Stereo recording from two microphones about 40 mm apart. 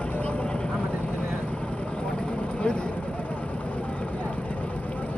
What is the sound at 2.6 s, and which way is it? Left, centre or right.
Speech, left.